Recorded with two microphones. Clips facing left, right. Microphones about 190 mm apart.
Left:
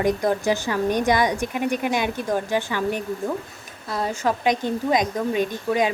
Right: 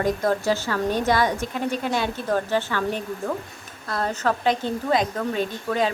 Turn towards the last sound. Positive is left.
turn(degrees=15)  # may be behind; listen again after turning